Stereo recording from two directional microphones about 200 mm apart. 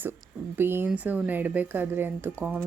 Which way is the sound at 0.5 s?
10° right (ahead or behind).